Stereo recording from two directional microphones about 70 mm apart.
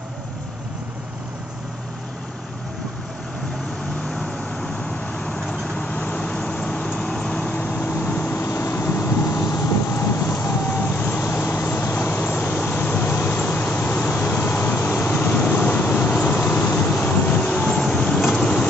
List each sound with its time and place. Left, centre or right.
5.2 s vehicle: centre
7.6 s vehicle: left
11.0 s vehicle: left
11.2 s vehicle: left; by 18.7 s centre